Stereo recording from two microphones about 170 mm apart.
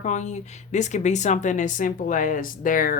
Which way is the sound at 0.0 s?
45° left (ahead or behind).